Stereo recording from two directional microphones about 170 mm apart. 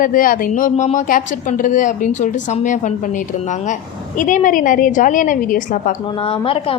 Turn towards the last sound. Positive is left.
turn(degrees=30)  # may be behind; listen again after turning